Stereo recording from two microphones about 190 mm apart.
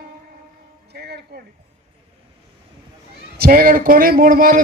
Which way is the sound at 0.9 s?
60° right (ahead or behind).